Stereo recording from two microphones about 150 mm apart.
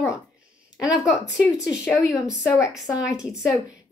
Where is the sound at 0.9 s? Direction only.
20° left (ahead or behind).